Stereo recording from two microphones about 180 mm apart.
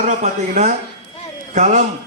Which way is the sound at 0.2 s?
40° right (ahead or behind).